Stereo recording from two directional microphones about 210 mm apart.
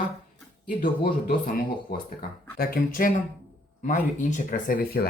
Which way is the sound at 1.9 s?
45° left (ahead or behind).